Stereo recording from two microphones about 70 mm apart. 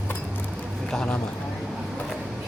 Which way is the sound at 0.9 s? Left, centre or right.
Centre.